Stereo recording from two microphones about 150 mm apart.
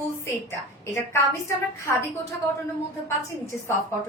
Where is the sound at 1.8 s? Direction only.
20° left (ahead or behind).